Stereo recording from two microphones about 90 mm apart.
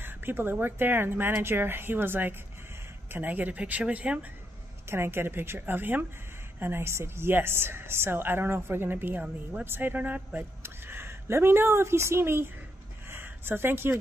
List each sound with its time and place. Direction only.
0.0 s a woman's voice: 25° right (ahead or behind)
4.8 s a woman's voice: 25° right (ahead or behind)
13.1 s a sound: 25° right (ahead or behind)